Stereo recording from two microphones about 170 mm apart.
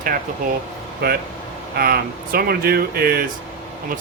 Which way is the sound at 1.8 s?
60° right (ahead or behind).